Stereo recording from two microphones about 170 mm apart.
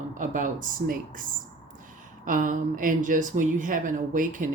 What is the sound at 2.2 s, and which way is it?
Speech, 50° right (ahead or behind).